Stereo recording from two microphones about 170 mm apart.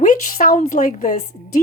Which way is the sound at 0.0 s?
55° left (ahead or behind).